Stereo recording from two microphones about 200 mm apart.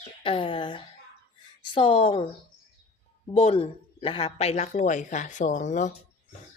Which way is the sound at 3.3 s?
30° left (ahead or behind).